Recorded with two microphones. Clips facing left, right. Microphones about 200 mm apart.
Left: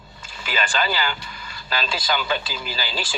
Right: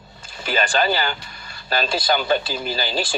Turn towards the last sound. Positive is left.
turn(degrees=-45)  # may be behind; listen again after turning